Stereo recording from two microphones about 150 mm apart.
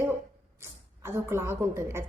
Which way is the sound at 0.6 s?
15° right (ahead or behind).